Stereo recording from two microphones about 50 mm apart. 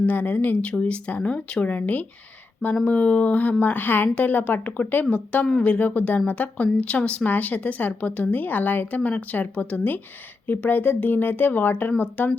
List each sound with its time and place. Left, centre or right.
0.0 s speech: left